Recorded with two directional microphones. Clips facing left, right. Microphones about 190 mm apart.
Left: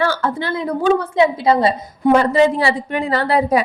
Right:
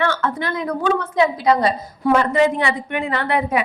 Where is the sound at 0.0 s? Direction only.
35° left (ahead or behind).